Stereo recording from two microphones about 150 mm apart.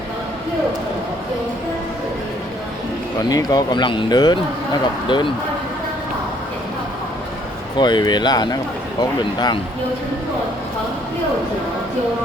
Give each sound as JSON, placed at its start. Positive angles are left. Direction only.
{"t": 3.2, "sound": "speech", "side_deg": 25}
{"t": 7.8, "sound": "speech", "side_deg": 30}